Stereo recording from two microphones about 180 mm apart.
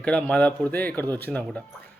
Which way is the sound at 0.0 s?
5° left (ahead or behind).